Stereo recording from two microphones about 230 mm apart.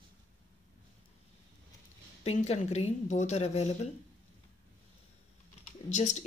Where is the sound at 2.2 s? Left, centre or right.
Left.